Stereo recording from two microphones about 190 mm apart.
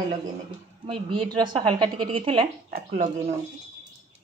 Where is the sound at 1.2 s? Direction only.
25° right (ahead or behind).